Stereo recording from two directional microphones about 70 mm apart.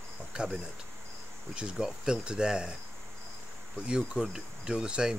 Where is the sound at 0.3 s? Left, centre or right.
Centre.